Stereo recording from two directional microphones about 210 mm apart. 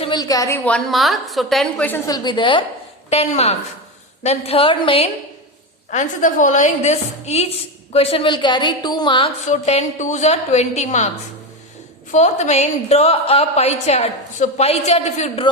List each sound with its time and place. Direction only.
0.0 s a woman's voice: 20° left (ahead or behind); by 2.0 s 5° left (ahead or behind)
2.0 s a woman's voice: 20° left (ahead or behind)
5.9 s a woman's voice: 35° left (ahead or behind)
12.1 s a woman's voice: 35° left (ahead or behind)